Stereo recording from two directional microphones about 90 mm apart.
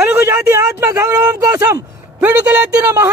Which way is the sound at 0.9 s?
40° right (ahead or behind).